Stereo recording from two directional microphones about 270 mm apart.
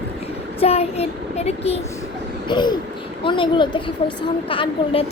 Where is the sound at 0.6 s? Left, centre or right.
Left.